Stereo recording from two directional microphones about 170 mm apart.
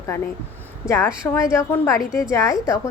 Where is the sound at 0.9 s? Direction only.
15° left (ahead or behind).